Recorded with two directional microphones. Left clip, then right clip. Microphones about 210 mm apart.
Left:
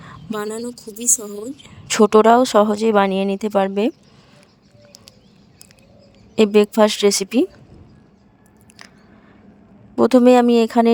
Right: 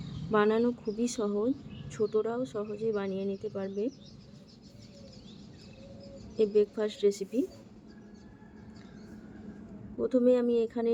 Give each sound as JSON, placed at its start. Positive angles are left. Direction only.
{"t": 0.3, "sound": "a woman's voice", "side_deg": 0}
{"t": 1.9, "sound": "speech", "side_deg": 60}
{"t": 6.3, "sound": "speech", "side_deg": 60}
{"t": 10.0, "sound": "speech", "side_deg": 60}